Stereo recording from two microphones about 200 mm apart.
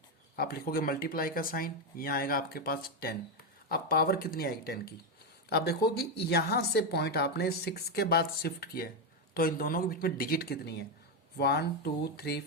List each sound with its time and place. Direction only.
0.3 s a woman's voice: 50° left (ahead or behind)